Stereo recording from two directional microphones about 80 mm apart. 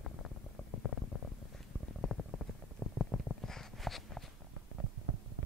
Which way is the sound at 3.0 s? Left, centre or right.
Centre.